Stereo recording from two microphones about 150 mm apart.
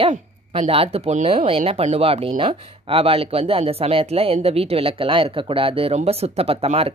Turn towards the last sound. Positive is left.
turn(degrees=-40)  # may be behind; listen again after turning